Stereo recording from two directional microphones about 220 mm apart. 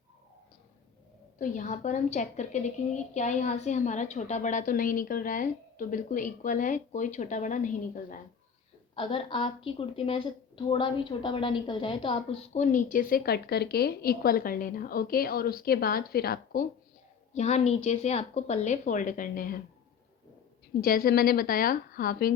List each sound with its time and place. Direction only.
1.4 s a woman's voice: 35° left (ahead or behind)
9.0 s a woman's voice: 25° left (ahead or behind); by 16.6 s 40° left (ahead or behind)
17.3 s a woman's voice: 30° left (ahead or behind)
20.8 s a woman's voice: 40° left (ahead or behind)